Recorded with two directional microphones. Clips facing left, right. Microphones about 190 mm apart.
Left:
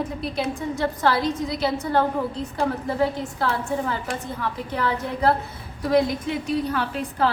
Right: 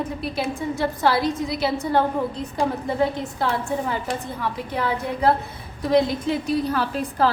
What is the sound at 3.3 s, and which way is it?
A woman's voice, 15° right (ahead or behind).